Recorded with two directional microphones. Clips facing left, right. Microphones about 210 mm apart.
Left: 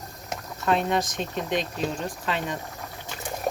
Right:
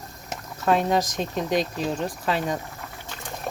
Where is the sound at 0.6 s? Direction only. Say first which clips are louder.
Right 3 dB; 40° right (ahead or behind).